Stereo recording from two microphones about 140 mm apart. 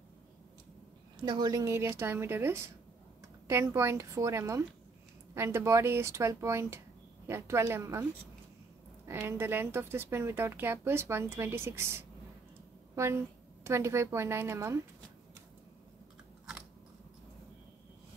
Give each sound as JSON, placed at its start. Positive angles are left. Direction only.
{"t": 1.2, "sound": "a woman's voice", "side_deg": -30}